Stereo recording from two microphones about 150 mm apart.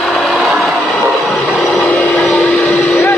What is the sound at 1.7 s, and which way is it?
Vehicle, 10° left (ahead or behind).